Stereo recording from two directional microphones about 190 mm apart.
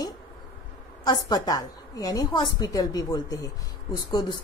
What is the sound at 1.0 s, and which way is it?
Speech, 20° left (ahead or behind).